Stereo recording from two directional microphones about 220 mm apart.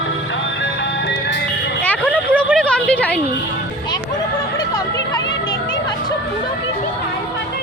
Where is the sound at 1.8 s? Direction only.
5° left (ahead or behind).